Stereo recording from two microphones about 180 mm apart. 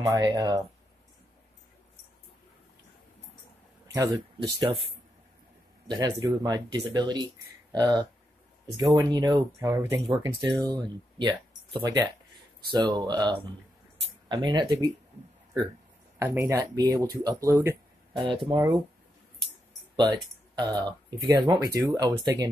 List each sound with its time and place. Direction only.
0.1 s speech: 20° right (ahead or behind)
3.9 s speech: 20° right (ahead or behind)
5.9 s speech: 20° right (ahead or behind)
16.2 s speech: 15° right (ahead or behind)
18.1 s speech: 30° right (ahead or behind)
20.0 s speech: 25° right (ahead or behind)